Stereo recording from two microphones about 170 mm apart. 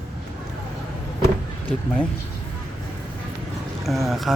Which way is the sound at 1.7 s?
5° left (ahead or behind).